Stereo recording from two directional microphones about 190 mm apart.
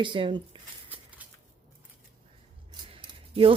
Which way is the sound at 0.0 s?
25° right (ahead or behind).